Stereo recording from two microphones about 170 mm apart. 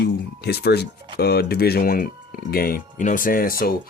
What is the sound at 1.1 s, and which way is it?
Speech, 70° left (ahead or behind).